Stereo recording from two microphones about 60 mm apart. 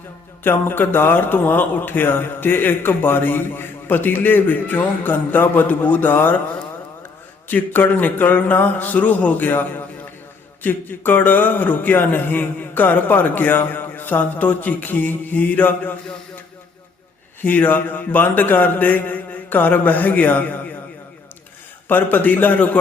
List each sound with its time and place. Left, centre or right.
0.4 s a man's voice: left
7.4 s a man's voice: left
17.4 s a man's voice: left
21.8 s a man's voice: left